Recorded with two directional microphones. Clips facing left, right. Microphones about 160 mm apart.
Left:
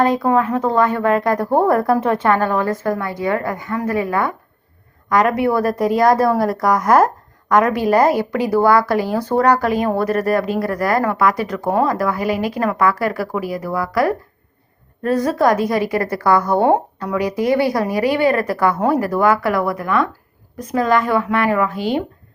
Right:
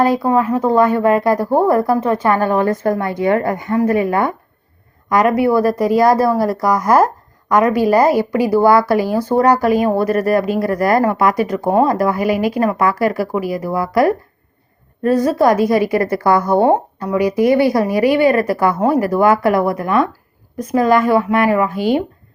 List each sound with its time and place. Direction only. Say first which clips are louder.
0.0 s speech: right 1 dB; 5° right (ahead or behind)
2.2 s a woman's voice: right 2 dB; 10° right (ahead or behind)
5.0 s a woman's voice: right 2 dB; 5° right (ahead or behind)
15.2 s a woman's voice: right 2 dB; 10° right (ahead or behind)